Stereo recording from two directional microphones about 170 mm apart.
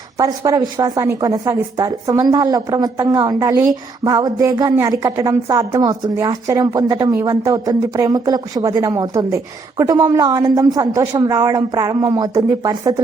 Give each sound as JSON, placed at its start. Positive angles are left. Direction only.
{"t": 0.2, "sound": "speech", "side_deg": -20}